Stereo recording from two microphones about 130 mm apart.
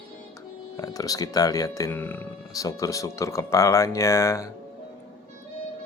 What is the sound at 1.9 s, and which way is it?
Speech, 15° left (ahead or behind).